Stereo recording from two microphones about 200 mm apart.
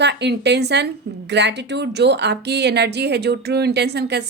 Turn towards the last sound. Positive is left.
turn(degrees=-55)  # may be behind; listen again after turning